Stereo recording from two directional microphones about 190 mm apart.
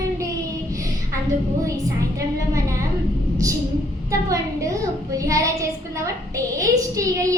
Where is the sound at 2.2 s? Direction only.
15° right (ahead or behind).